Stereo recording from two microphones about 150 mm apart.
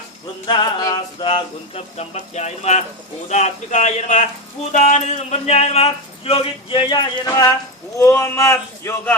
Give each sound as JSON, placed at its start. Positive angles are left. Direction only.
{"t": 0.4, "sound": "a man's voice", "side_deg": 30}